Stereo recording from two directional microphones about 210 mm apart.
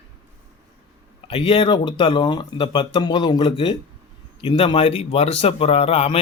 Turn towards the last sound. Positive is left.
turn(degrees=30)  # may be behind; listen again after turning